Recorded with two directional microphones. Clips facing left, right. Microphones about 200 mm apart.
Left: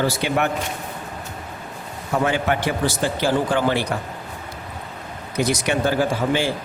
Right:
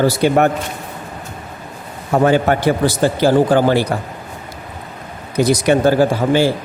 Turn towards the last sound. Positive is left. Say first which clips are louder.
# right 7 dB
turn(degrees=-35)  # may be behind; listen again after turning